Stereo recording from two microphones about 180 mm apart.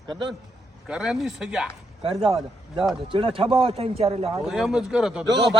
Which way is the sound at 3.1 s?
30° right (ahead or behind).